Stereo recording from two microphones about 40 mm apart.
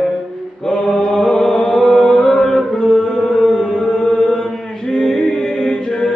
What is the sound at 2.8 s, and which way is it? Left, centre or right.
Music, centre.